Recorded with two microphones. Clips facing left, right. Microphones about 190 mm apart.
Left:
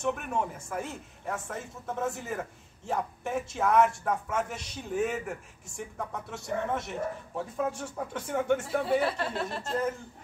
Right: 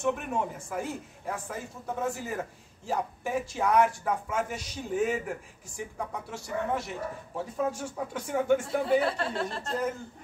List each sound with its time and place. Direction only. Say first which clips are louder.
0.0 s speech: right 1 dB; 5° right (ahead or behind)